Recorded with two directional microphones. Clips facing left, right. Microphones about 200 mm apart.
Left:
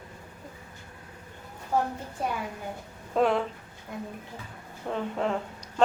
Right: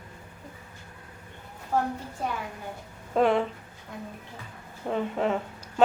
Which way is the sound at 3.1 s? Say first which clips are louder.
Right 2 dB; centre (ahead or behind).